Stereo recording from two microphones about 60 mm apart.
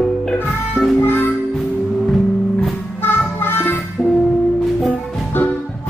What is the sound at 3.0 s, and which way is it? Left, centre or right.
Music, left.